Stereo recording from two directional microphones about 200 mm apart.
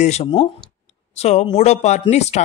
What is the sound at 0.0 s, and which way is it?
Speech, 30° left (ahead or behind).